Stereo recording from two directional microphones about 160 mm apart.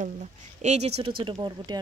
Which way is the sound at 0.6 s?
45° right (ahead or behind).